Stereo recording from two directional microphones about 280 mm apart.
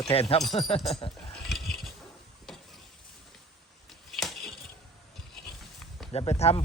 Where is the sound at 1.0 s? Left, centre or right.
Centre.